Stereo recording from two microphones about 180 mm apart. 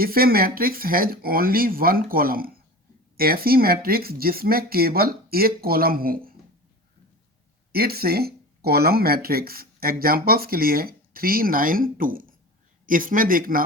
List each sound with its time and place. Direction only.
0.0 s speech: 55° right (ahead or behind)
7.7 s a man's voice: 60° right (ahead or behind)